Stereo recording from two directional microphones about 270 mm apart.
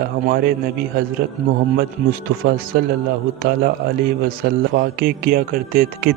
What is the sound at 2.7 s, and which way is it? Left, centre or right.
Speech, right.